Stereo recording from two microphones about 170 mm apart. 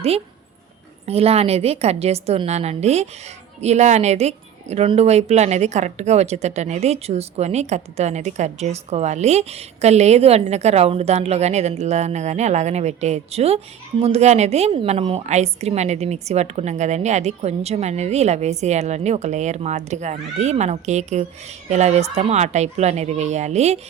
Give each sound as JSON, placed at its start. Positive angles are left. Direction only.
{"t": 1.0, "sound": "speech", "side_deg": -35}